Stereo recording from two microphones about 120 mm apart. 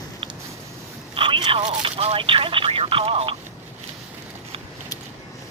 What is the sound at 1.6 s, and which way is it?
Speech, 60° right (ahead or behind).